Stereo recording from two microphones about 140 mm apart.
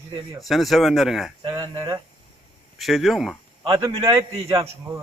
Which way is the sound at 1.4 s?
25° right (ahead or behind).